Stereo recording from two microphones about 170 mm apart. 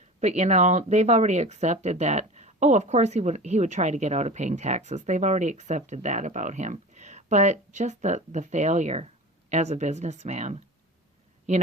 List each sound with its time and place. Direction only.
0.2 s speech: 40° right (ahead or behind)